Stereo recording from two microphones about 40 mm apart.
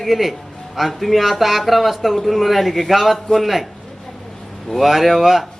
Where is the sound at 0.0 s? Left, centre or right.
Centre.